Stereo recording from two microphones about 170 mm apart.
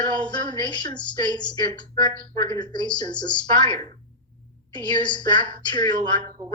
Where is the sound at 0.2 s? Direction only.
25° left (ahead or behind).